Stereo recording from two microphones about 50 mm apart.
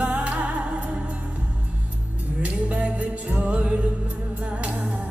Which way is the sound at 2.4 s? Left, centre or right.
Right.